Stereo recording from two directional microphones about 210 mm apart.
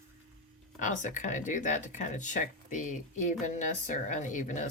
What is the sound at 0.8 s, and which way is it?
Speech, 35° left (ahead or behind).